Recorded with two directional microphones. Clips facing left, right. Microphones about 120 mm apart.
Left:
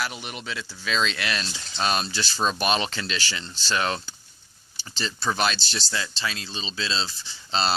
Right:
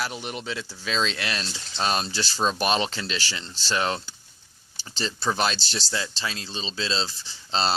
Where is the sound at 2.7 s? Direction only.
25° right (ahead or behind).